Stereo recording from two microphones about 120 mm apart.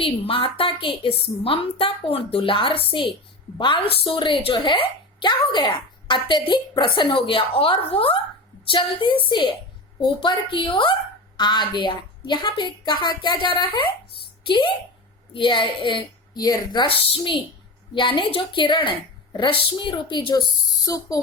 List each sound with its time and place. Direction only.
0.0 s a woman's voice: 50° left (ahead or behind)
20.8 s speech: 30° left (ahead or behind)